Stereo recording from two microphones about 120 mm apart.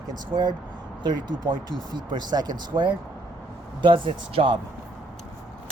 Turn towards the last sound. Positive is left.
turn(degrees=-45)  # may be behind; listen again after turning